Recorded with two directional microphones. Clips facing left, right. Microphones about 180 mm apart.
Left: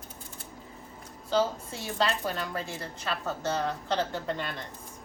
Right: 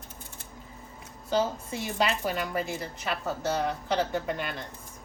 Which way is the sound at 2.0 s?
10° right (ahead or behind).